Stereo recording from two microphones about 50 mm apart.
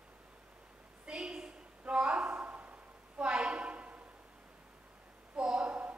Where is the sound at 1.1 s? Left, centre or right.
Centre.